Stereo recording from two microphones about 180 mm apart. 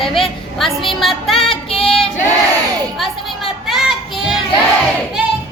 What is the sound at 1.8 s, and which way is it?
Choir, 5° left (ahead or behind).